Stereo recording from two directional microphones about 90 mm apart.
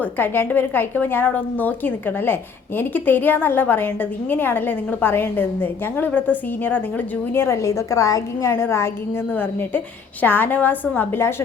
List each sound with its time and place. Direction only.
0.0 s a woman's voice: 20° left (ahead or behind)